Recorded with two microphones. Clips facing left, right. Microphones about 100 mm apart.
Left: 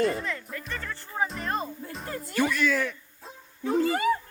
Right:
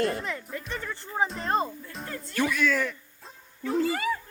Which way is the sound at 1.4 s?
35° right (ahead or behind).